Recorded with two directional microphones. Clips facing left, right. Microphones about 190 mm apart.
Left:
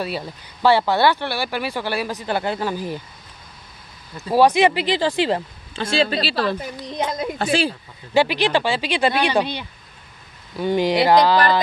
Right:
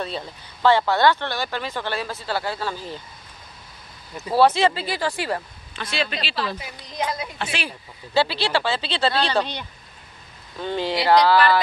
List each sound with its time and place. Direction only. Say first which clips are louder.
0.0 s speech: left 3 dB; 10° left (ahead or behind)
4.3 s speech: left 2 dB; 15° left (ahead or behind); by 7.7 s 35° left (ahead or behind)
8.1 s speech: left 4 dB; 15° left (ahead or behind)